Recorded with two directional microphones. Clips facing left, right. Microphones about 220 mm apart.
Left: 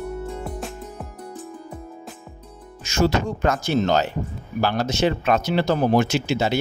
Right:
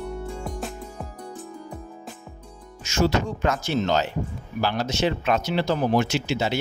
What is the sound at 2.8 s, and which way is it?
Speech, 45° left (ahead or behind).